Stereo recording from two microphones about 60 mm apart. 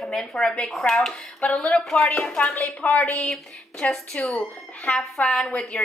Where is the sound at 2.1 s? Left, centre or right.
Left.